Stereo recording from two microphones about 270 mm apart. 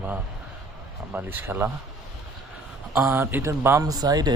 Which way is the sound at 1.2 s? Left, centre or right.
Centre.